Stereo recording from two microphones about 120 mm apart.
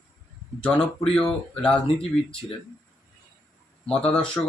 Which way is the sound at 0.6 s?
5° left (ahead or behind).